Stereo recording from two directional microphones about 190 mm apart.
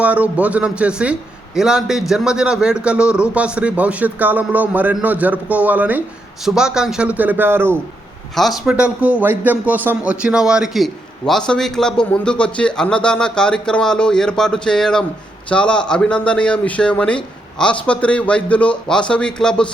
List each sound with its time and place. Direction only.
0.0 s a man's voice: 5° right (ahead or behind)
8.4 s a man's voice: centre (ahead or behind)